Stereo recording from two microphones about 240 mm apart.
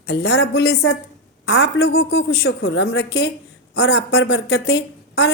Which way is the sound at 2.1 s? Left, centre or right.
Left.